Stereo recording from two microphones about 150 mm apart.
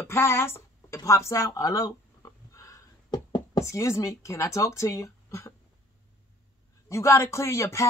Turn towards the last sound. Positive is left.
turn(degrees=20)  # may be behind; listen again after turning